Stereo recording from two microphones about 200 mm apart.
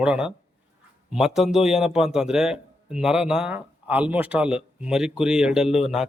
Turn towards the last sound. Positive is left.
turn(degrees=0)  # may be behind; listen again after turning